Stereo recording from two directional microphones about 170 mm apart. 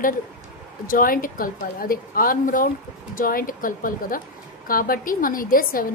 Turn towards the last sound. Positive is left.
turn(degrees=55)  # may be behind; listen again after turning